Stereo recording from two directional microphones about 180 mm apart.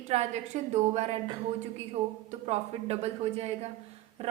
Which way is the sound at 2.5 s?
35° right (ahead or behind).